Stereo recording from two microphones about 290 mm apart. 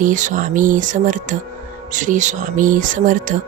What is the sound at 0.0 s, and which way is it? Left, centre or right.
Speech, right.